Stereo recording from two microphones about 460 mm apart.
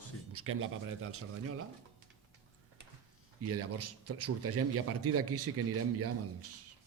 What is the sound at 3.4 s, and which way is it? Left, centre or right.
A man's voice, right.